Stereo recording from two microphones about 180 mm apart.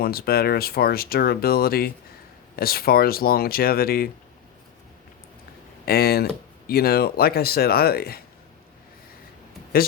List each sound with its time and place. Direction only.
0.0 s speech: 55° left (ahead or behind)
5.8 s speech: 60° left (ahead or behind)